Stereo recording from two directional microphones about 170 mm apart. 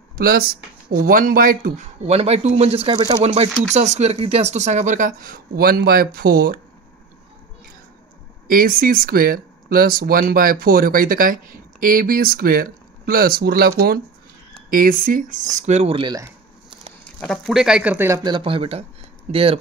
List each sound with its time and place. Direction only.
0.2 s speech: 60° right (ahead or behind)
2.0 s speech: 40° right (ahead or behind); by 6.6 s 60° right (ahead or behind)
8.5 s speech: 55° right (ahead or behind); by 16.2 s 30° right (ahead or behind)
17.2 s speech: centre (ahead or behind); by 19.6 s 35° right (ahead or behind)